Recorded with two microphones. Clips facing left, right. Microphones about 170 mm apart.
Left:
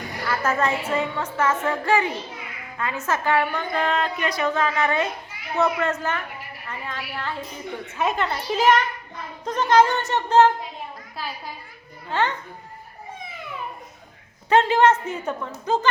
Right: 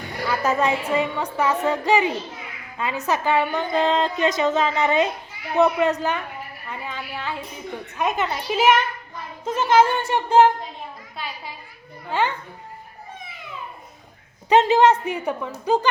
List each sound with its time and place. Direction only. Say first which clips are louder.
0.3 s a woman's voice: right 2 dB; 15° right (ahead or behind)
11.2 s a child's voice: left 1 dB; centre (ahead or behind)
12.1 s a woman's voice: right 1 dB; 10° right (ahead or behind)
14.5 s a woman's voice: right 2 dB; 15° right (ahead or behind)